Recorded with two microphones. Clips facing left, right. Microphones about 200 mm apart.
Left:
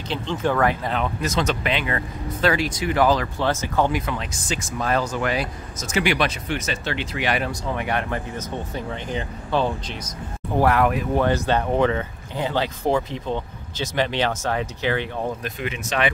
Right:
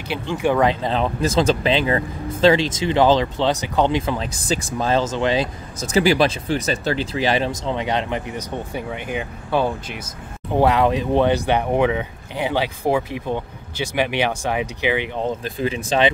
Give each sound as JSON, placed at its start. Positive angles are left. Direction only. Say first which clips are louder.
{"t": 0.1, "sound": "speech", "louder": "right 3 dB", "side_deg": -10}
{"t": 10.6, "sound": "speech", "louder": "right 2 dB", "side_deg": -20}
{"t": 15.4, "sound": "speech", "louder": "right 5 dB", "side_deg": -30}